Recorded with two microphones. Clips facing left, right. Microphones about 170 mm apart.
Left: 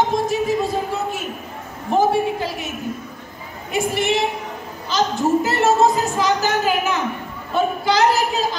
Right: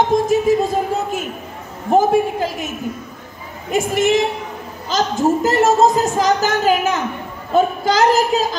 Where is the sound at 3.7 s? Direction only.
45° right (ahead or behind).